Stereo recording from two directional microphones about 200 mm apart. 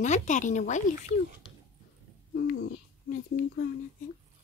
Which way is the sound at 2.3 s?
50° left (ahead or behind).